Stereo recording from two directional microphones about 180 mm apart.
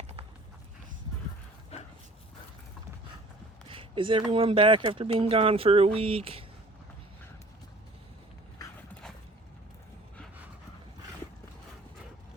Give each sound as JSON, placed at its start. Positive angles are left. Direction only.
{"t": 1.7, "sound": "dog", "side_deg": 35}
{"t": 3.7, "sound": "speech", "side_deg": -30}